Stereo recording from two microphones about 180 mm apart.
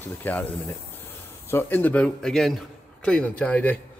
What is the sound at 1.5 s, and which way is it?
Speech, 10° left (ahead or behind).